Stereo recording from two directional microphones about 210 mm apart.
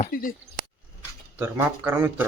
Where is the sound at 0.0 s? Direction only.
40° left (ahead or behind).